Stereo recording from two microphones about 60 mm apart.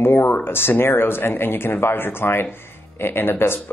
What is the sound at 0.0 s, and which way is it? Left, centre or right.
Speech, left.